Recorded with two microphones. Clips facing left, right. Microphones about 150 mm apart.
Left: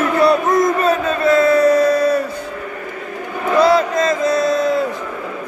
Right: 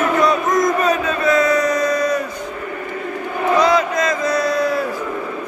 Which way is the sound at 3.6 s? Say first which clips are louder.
Left 2 dB; 30° left (ahead or behind).